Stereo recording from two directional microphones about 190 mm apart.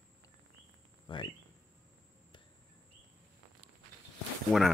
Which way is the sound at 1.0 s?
25° left (ahead or behind).